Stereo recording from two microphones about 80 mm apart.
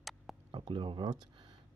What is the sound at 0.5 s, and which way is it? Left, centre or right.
Speech, right.